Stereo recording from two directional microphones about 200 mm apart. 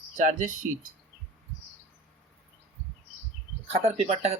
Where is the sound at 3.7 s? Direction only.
30° right (ahead or behind).